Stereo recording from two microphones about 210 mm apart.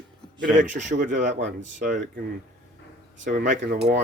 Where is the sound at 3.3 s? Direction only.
40° right (ahead or behind).